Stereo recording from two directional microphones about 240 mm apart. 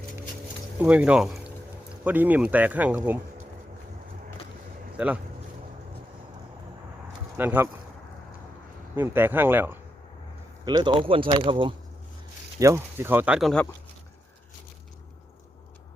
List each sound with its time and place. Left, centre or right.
0.8 s speech: centre
4.9 s speech: centre
7.3 s speech: centre
9.0 s speech: centre